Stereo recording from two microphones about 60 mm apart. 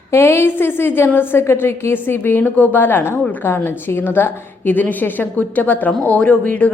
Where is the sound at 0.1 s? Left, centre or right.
Left.